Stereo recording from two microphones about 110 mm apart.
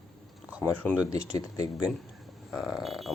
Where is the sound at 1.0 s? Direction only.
30° left (ahead or behind).